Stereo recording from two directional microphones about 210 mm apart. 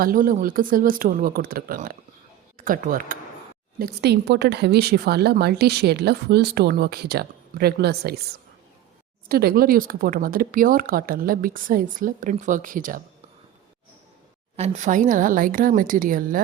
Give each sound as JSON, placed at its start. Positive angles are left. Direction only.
{"t": 0.0, "sound": "speech", "side_deg": -45}
{"t": 9.3, "sound": "speech", "side_deg": -45}
{"t": 14.5, "sound": "speech", "side_deg": -30}